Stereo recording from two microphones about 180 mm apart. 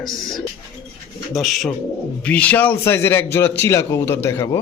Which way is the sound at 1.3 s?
Centre (ahead or behind).